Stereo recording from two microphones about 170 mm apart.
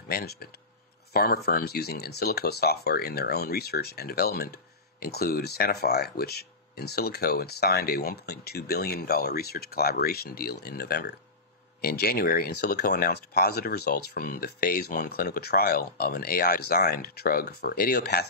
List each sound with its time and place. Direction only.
0.1 s speech: 65° left (ahead or behind)
11.8 s speech: 60° left (ahead or behind)